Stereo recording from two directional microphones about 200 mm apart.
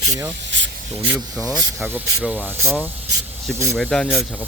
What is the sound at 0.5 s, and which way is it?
Speech, 65° right (ahead or behind).